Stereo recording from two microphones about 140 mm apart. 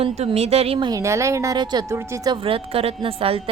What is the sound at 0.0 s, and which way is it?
Speech, 45° right (ahead or behind).